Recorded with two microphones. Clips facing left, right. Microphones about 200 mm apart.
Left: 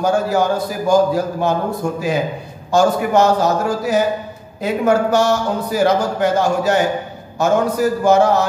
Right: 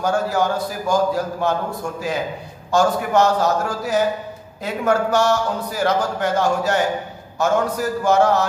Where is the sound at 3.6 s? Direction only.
5° left (ahead or behind).